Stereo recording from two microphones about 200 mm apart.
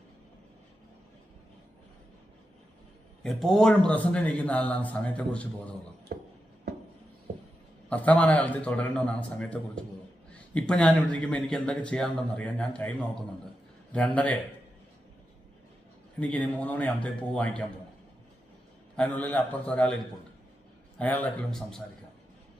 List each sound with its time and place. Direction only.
3.2 s a man's voice: centre (ahead or behind)
6.1 s a sound: 50° right (ahead or behind)
7.9 s a man's voice: 5° left (ahead or behind)
16.2 s a man's voice: 5° left (ahead or behind)
18.9 s a man's voice: 5° left (ahead or behind)
21.0 s a man's voice: 10° left (ahead or behind)